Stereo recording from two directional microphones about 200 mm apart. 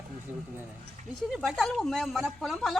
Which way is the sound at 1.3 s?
Centre (ahead or behind).